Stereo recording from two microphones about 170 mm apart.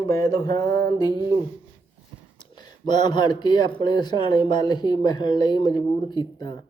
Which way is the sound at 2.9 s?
25° left (ahead or behind).